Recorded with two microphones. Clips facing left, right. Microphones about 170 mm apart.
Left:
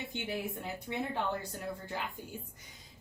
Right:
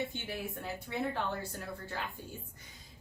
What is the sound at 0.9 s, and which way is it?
Speech, 20° left (ahead or behind).